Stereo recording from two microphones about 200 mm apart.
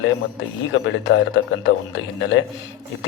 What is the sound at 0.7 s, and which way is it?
Speech, 70° left (ahead or behind).